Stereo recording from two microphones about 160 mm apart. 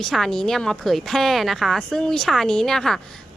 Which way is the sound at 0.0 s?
Centre (ahead or behind).